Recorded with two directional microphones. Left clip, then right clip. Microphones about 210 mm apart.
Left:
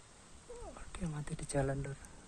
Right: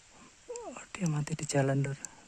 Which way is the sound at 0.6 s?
50° right (ahead or behind).